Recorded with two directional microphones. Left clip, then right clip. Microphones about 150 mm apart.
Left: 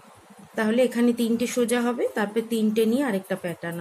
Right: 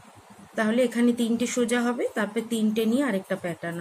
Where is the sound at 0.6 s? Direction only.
25° left (ahead or behind).